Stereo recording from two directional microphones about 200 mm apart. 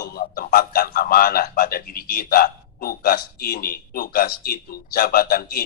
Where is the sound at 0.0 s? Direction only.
50° left (ahead or behind).